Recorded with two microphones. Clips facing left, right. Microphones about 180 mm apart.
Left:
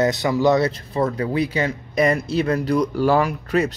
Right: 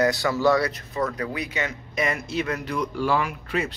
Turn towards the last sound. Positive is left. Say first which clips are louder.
# left 7 dB
turn(degrees=40)  # may be behind; listen again after turning